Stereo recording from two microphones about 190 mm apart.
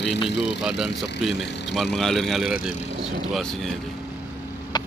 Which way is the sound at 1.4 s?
65° left (ahead or behind).